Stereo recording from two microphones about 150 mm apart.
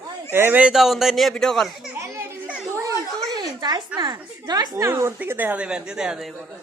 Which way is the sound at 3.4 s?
25° right (ahead or behind).